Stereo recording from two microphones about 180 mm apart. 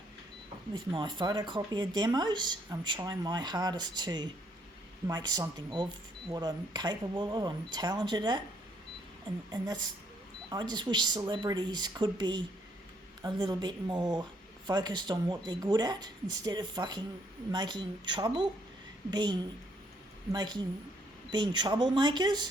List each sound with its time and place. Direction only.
0.7 s speech: 25° right (ahead or behind)